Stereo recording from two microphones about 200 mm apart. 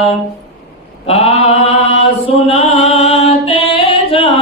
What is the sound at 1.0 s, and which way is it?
Mantra, 30° left (ahead or behind).